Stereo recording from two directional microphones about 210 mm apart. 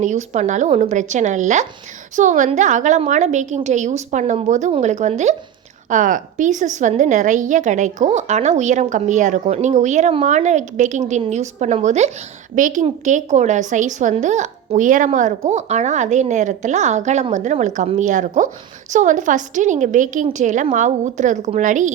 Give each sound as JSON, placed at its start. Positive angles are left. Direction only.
{"t": 0.0, "sound": "a woman's voice", "side_deg": -35}